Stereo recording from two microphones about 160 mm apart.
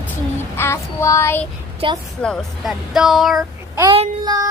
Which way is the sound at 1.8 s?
35° right (ahead or behind).